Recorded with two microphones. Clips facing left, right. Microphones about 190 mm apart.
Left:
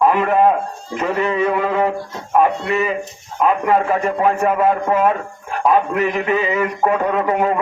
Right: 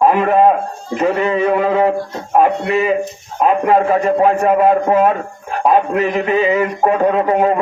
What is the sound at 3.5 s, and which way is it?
A man's voice, 40° right (ahead or behind).